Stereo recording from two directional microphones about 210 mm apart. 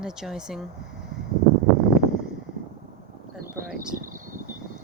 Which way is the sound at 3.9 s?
40° right (ahead or behind).